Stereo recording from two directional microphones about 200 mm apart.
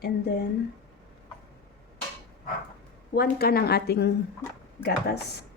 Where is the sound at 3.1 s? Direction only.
50° left (ahead or behind).